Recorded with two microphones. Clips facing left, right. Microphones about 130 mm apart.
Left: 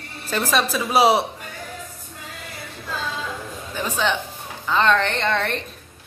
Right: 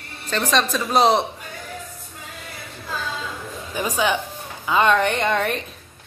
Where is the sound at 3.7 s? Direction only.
10° right (ahead or behind).